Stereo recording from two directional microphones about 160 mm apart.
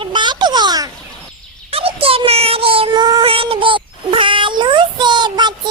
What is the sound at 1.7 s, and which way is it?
Child singing, 35° right (ahead or behind).